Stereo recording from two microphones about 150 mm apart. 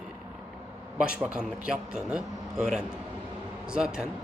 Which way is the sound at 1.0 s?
5° right (ahead or behind).